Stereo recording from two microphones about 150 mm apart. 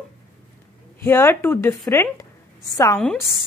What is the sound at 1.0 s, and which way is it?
A woman's voice, 15° left (ahead or behind).